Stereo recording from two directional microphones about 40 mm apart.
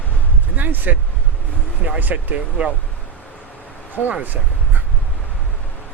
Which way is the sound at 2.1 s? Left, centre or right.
Right.